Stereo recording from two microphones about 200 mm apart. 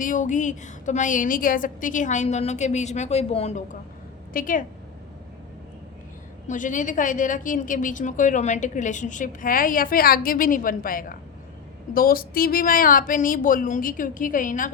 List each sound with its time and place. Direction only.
0.0 s a woman's voice: 40° left (ahead or behind)
4.4 s a woman's voice: 40° left (ahead or behind)
6.5 s a woman's voice: 40° left (ahead or behind)